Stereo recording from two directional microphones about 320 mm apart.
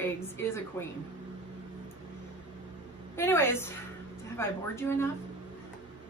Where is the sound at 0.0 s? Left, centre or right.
Centre.